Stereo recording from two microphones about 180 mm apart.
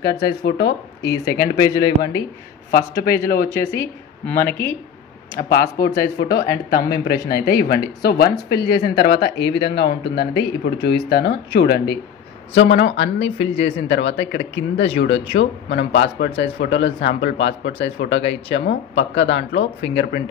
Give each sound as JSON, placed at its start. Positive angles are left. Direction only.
{"t": 0.4, "sound": "speech", "side_deg": 70}
{"t": 1.0, "sound": "speech", "side_deg": 20}
{"t": 3.4, "sound": "speech", "side_deg": 15}
{"t": 5.5, "sound": "speech", "side_deg": 60}
{"t": 12.5, "sound": "speech", "side_deg": 75}